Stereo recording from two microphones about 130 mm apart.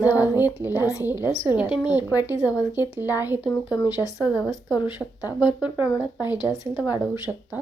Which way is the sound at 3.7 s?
30° left (ahead or behind).